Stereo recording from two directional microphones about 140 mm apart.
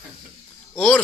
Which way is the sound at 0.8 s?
10° left (ahead or behind).